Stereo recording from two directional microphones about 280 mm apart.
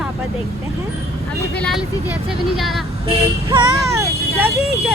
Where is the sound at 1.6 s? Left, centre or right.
Centre.